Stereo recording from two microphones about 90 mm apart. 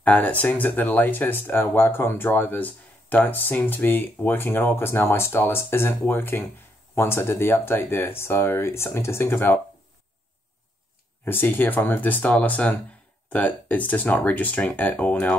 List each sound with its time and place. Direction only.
0.0 s speech: 20° left (ahead or behind)
11.2 s speech: 25° left (ahead or behind)